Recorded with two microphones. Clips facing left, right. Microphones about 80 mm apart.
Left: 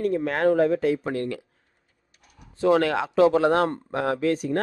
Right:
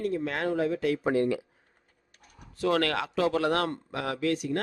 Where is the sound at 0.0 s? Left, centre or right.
Left.